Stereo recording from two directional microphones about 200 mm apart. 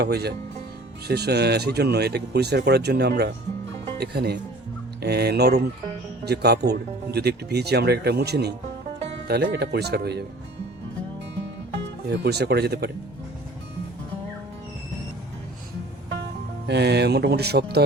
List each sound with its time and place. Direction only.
0.0 s speech: 55° right (ahead or behind)
12.1 s speech: 55° right (ahead or behind)
16.6 s speech: 55° right (ahead or behind)